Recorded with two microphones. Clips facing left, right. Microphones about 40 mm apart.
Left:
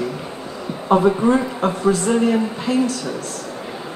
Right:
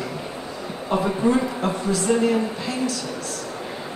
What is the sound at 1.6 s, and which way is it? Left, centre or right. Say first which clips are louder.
Speech: left 4 dB; left.